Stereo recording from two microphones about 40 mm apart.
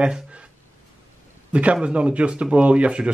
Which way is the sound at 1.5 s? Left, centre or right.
Right.